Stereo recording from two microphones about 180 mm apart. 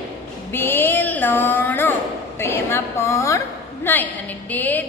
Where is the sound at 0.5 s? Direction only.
10° left (ahead or behind).